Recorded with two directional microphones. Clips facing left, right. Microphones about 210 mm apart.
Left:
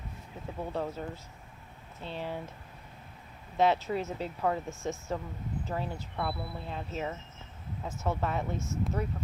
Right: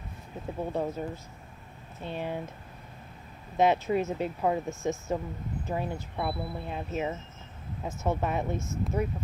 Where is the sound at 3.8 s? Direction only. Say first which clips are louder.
Right 5 dB; 15° right (ahead or behind).